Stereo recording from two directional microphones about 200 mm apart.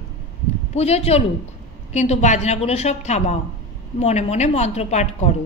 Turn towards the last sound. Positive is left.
turn(degrees=35)  # may be behind; listen again after turning